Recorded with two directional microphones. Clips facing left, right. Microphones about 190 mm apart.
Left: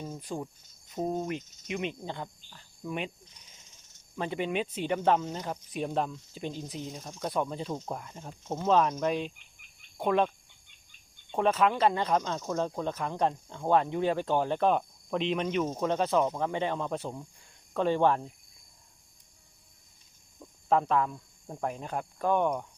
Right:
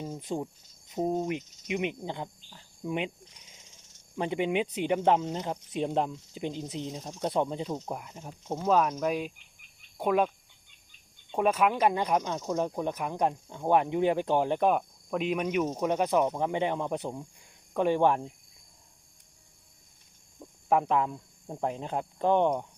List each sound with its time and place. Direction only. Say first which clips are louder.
0.0 s speech: right 3 dB; 20° right (ahead or behind)
0.9 s cricket: right 2 dB; 15° right (ahead or behind)
4.2 s speech: right 3 dB; 15° right (ahead or behind)
20.4 s speech: even; 15° right (ahead or behind)